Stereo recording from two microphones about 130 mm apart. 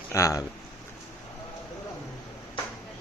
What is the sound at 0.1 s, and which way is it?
Speech, 25° left (ahead or behind).